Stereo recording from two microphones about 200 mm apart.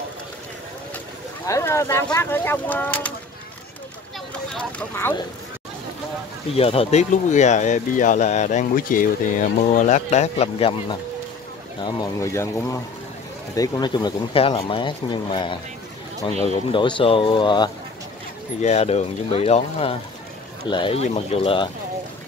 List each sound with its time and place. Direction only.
1.4 s speech: 15° left (ahead or behind)
4.6 s speech: 5° left (ahead or behind)
6.5 s speech: 30° left (ahead or behind)
18.6 s speech: 35° left (ahead or behind)